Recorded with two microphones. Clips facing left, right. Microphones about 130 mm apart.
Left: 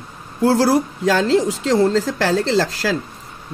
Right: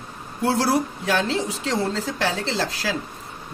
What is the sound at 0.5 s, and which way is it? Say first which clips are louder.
Speech: left 5 dB; 90° left.